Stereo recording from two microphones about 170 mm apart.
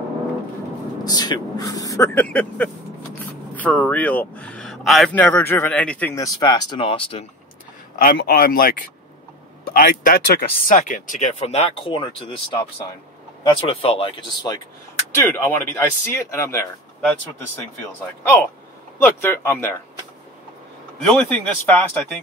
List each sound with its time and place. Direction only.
1.0 s speech: 25° left (ahead or behind)
6.2 s speech: 25° left (ahead or behind)
7.9 s a man's voice: 55° left (ahead or behind); by 14.6 s 25° left (ahead or behind)
15.2 s speech: 15° left (ahead or behind)
18.9 s speech: 15° left (ahead or behind)
21.1 s speech: 5° left (ahead or behind)